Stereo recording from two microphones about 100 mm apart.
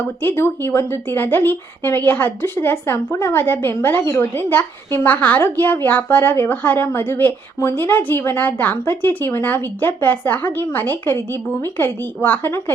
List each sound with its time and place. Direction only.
0.2 s a woman's voice: 20° left (ahead or behind)